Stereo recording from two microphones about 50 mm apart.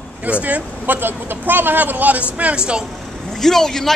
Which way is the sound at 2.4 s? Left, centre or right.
Right.